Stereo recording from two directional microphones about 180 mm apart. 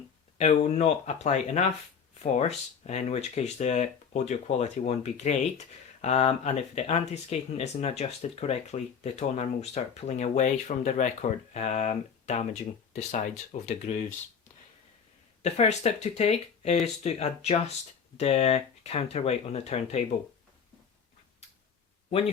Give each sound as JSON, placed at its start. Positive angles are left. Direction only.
{"t": 0.3, "sound": "speech", "side_deg": 35}
{"t": 15.4, "sound": "speech", "side_deg": 40}